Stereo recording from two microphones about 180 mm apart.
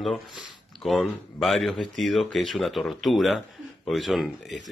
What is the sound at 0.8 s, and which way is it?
Speech, centre (ahead or behind).